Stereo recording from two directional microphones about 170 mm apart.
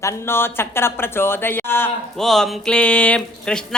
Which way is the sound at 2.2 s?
Centre (ahead or behind).